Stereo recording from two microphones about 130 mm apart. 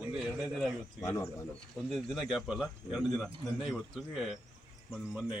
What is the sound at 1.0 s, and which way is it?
Speech, 20° left (ahead or behind).